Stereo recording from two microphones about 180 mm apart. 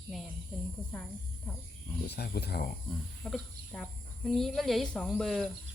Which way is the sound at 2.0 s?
60° left (ahead or behind).